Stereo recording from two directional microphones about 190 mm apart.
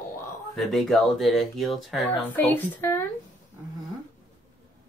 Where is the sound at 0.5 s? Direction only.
Centre (ahead or behind).